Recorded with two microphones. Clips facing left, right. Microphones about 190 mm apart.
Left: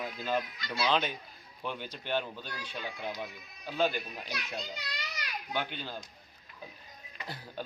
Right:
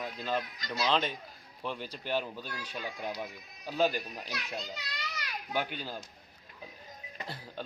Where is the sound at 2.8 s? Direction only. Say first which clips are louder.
Right 1 dB; 40° right (ahead or behind).